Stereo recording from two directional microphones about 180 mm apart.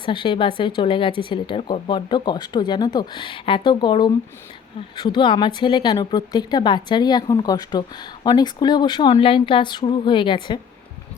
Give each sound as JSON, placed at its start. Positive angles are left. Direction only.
{"t": 0.0, "sound": "speech", "side_deg": 25}